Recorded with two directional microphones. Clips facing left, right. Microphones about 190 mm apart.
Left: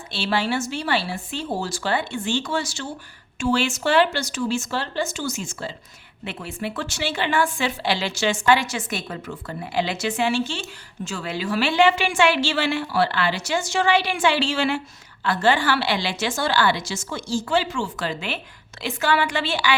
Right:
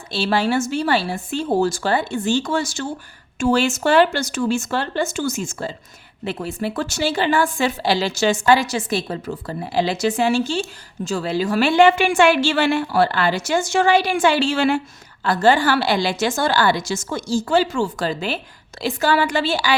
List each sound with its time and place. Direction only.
0.1 s a woman's voice: 40° right (ahead or behind)